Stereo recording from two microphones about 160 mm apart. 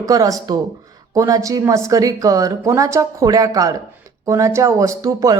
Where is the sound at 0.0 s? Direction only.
20° right (ahead or behind).